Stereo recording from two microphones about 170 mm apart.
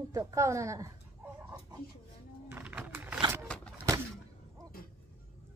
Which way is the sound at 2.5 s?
10° right (ahead or behind).